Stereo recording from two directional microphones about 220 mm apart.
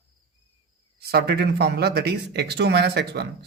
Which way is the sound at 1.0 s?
45° right (ahead or behind).